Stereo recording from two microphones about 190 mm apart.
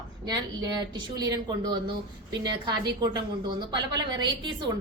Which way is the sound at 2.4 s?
20° right (ahead or behind).